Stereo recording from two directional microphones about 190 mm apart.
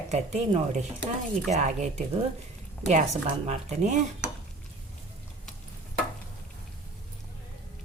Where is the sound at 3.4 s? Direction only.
40° right (ahead or behind).